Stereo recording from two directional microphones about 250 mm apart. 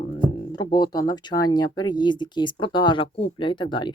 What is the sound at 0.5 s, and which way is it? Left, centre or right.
Speech, centre.